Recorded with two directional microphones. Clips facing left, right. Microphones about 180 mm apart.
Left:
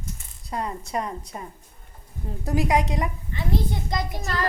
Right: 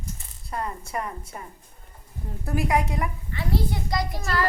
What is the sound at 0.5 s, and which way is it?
A child's voice, 15° left (ahead or behind).